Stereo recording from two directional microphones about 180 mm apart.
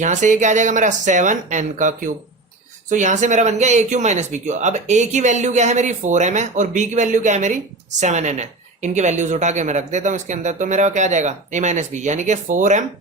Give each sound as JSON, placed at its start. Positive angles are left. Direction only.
{"t": 0.0, "sound": "speech", "side_deg": -45}